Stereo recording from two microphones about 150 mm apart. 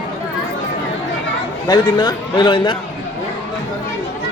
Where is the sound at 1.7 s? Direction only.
30° left (ahead or behind).